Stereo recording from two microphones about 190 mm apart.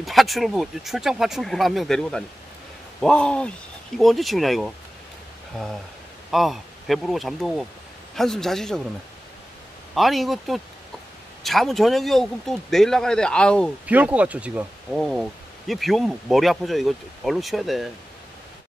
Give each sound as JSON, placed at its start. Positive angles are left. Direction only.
{"t": 0.0, "sound": "speech", "side_deg": 0}
{"t": 9.9, "sound": "speech", "side_deg": 0}
{"t": 13.8, "sound": "speech", "side_deg": -5}